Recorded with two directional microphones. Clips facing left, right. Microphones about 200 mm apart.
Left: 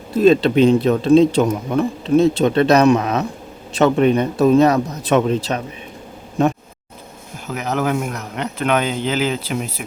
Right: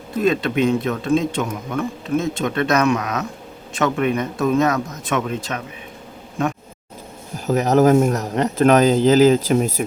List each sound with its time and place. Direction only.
0.2 s speech: 30° left (ahead or behind)
7.3 s speech: 40° right (ahead or behind)